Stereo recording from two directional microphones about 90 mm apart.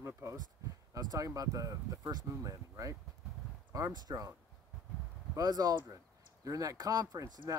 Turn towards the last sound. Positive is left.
turn(degrees=-40)  # may be behind; listen again after turning